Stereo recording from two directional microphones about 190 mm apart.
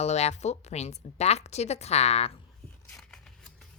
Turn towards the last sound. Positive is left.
turn(degrees=5)  # may be behind; listen again after turning